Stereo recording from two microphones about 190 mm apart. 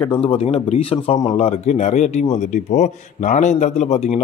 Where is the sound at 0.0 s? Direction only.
25° left (ahead or behind).